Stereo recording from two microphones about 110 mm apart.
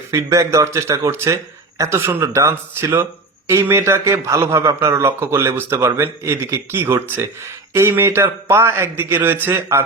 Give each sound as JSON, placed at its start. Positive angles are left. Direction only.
{"t": 0.1, "sound": "speech", "side_deg": -30}